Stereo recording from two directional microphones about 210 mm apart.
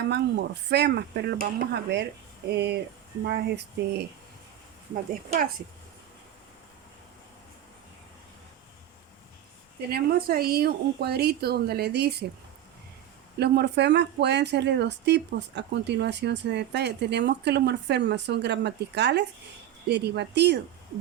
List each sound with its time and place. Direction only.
0.1 s speech: 50° right (ahead or behind)
9.9 s speech: 45° right (ahead or behind)
13.4 s speech: 55° right (ahead or behind)